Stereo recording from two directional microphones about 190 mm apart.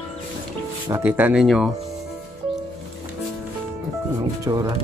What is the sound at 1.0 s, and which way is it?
Speech, 10° right (ahead or behind).